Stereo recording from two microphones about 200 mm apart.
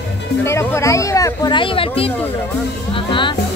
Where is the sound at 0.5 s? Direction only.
15° left (ahead or behind).